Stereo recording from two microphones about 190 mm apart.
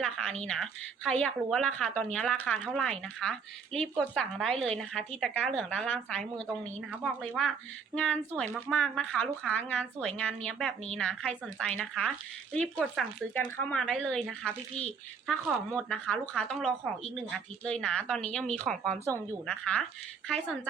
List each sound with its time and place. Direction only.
0.0 s speech: 5° left (ahead or behind)
19.0 s a woman's voice: 15° right (ahead or behind)
19.5 s speech: 5° left (ahead or behind)